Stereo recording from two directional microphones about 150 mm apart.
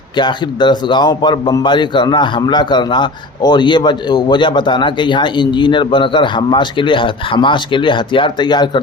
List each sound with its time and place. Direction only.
0.2 s a man's voice: 30° left (ahead or behind)